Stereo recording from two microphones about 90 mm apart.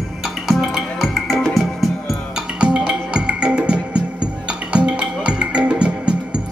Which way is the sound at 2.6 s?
10° right (ahead or behind).